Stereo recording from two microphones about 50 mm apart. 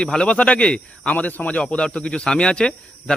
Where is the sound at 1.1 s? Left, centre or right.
Left.